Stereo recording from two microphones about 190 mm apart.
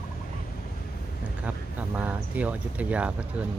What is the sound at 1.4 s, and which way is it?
Speech, 5° right (ahead or behind).